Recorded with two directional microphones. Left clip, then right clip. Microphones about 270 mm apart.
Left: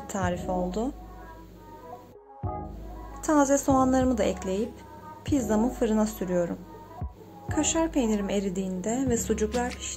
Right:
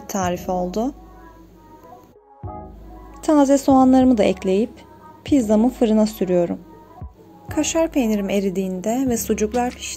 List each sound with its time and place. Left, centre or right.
0.0 s a woman's voice: centre
3.2 s speech: centre
7.4 s a woman's voice: centre